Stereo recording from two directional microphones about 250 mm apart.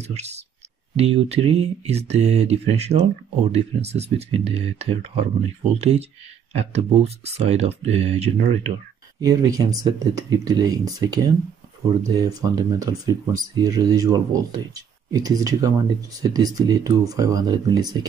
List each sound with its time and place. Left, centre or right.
0.0 s speech: right
9.2 s speech: centre